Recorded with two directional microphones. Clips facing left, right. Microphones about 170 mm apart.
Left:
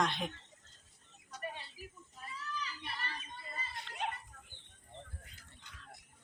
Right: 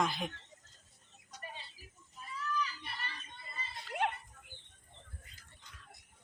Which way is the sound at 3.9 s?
60° right (ahead or behind).